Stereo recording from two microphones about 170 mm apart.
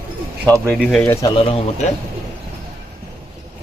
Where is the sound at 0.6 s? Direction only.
Centre (ahead or behind).